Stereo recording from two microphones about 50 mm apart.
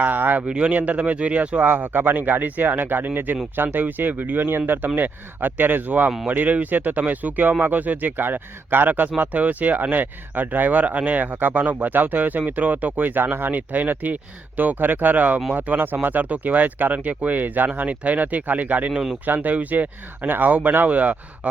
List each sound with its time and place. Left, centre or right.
0.0 s a sound: right
0.4 s speech: right
1.6 s speech: right